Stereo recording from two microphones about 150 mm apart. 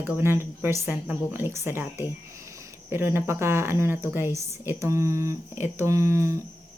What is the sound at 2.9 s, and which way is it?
A woman's voice, 15° right (ahead or behind).